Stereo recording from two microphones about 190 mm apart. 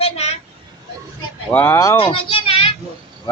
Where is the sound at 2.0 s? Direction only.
25° left (ahead or behind).